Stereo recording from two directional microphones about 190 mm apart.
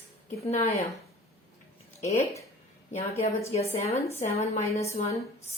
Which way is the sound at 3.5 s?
35° left (ahead or behind).